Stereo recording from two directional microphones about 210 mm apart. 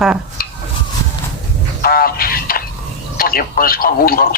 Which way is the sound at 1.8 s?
45° left (ahead or behind).